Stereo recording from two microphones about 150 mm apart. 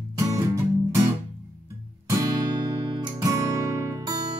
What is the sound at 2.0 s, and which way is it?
Music, 25° right (ahead or behind).